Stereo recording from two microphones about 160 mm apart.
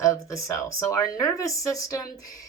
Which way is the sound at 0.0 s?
20° left (ahead or behind).